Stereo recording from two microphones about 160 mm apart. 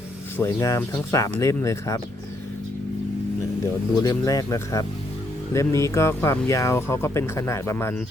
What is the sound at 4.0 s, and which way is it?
Speech, 25° left (ahead or behind).